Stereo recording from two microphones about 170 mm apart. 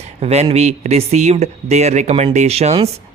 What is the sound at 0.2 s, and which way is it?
Speech, 40° right (ahead or behind).